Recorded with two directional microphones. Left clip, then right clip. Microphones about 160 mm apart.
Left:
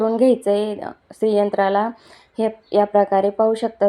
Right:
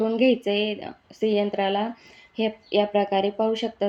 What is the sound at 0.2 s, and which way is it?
Speech, 65° left (ahead or behind).